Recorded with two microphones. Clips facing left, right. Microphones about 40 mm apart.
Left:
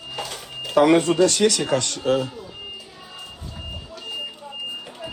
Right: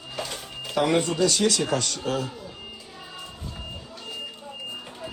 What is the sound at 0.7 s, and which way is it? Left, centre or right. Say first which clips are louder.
Speech: left 7 dB; left.